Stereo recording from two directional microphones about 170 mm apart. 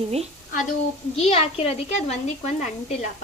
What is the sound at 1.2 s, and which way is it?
Speech, 35° left (ahead or behind).